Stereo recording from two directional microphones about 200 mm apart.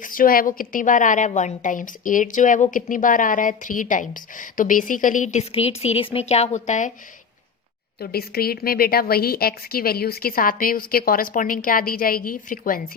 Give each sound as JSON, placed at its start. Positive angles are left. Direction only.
{"t": 0.0, "sound": "a woman's voice", "side_deg": 45}
{"t": 7.9, "sound": "a woman's voice", "side_deg": 50}